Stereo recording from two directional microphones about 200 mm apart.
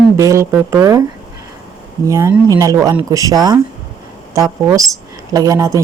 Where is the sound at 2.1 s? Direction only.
15° right (ahead or behind).